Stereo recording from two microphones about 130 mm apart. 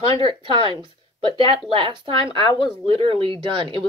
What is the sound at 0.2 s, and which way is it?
Speech, 40° right (ahead or behind).